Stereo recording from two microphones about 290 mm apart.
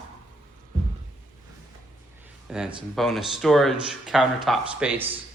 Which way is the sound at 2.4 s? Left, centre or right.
Centre.